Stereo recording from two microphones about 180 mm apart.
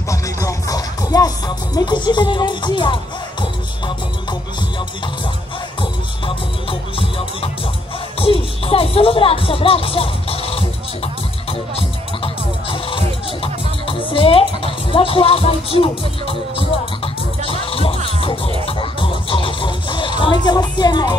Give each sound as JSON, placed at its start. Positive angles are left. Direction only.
{"t": 0.1, "sound": "music", "side_deg": 20}
{"t": 1.8, "sound": "speech", "side_deg": 25}
{"t": 11.7, "sound": "music", "side_deg": 30}